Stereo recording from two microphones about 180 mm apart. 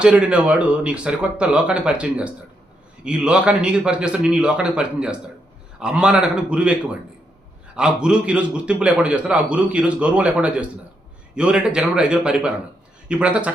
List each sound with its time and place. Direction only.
0.0 s a man's voice: 5° right (ahead or behind)
7.8 s a man's voice: 5° right (ahead or behind)